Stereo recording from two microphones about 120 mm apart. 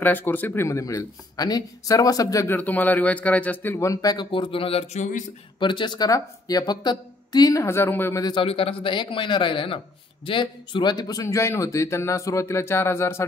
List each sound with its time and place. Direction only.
0.0 s a man's voice: 15° left (ahead or behind)
2.5 s speech: 15° left (ahead or behind); by 4.3 s 30° left (ahead or behind)
4.3 s speech: 45° left (ahead or behind)
5.6 s speech: 40° left (ahead or behind); by 8.2 s 20° left (ahead or behind)
8.2 s speech: 35° left (ahead or behind)
8.5 s a man's voice: 50° left (ahead or behind); by 13.2 s 20° left (ahead or behind)